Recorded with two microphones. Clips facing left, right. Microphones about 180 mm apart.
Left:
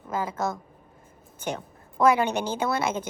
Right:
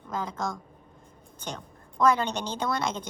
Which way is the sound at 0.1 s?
5° left (ahead or behind).